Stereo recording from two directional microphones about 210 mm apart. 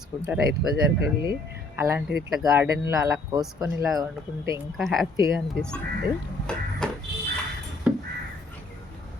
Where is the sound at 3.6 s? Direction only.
Centre (ahead or behind).